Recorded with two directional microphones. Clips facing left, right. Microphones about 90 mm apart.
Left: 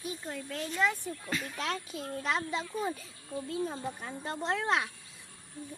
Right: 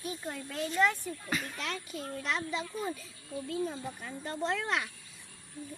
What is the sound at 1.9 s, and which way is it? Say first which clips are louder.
Speech: even; 40° left (ahead or behind).